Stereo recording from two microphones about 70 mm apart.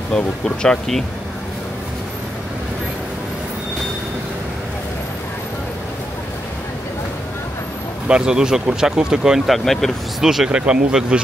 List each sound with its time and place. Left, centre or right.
0.1 s speech: centre
8.1 s speech: centre
9.7 s speech: centre
10.2 s speech: centre